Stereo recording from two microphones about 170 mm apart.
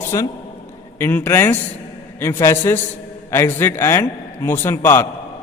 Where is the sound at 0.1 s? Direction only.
20° left (ahead or behind).